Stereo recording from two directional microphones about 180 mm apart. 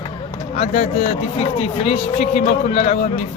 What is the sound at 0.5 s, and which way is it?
A man's voice, 35° left (ahead or behind).